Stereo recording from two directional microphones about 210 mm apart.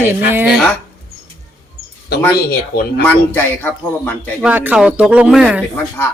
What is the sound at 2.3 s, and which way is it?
Speech, 50° left (ahead or behind).